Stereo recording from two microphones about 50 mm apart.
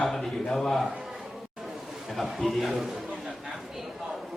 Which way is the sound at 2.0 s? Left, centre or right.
Centre.